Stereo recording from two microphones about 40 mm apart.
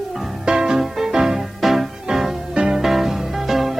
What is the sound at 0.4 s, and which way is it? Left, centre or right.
Music, centre.